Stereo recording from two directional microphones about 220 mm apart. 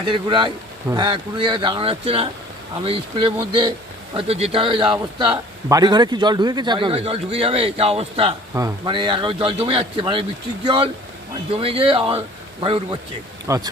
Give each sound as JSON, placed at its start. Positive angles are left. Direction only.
{"t": 0.0, "sound": "a man's voice", "side_deg": -20}